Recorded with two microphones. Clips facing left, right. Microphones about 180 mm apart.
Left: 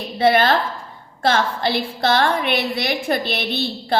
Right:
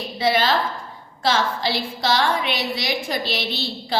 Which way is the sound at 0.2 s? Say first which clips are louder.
Left 4 dB; 55° left (ahead or behind).